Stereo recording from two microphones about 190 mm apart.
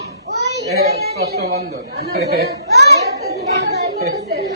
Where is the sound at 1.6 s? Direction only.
60° right (ahead or behind).